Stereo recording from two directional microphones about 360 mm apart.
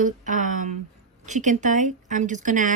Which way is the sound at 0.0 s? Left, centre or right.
Right.